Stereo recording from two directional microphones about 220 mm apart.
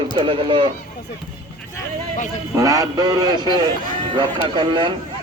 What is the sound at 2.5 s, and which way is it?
Speech, 15° right (ahead or behind).